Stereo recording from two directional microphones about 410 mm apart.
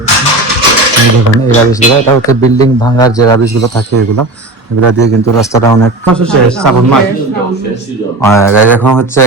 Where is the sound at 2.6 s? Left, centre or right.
Centre.